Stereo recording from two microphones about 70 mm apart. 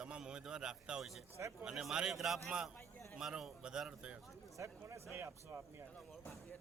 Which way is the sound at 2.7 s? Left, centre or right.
Left.